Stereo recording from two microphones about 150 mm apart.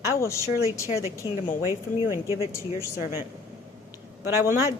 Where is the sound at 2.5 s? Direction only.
15° left (ahead or behind).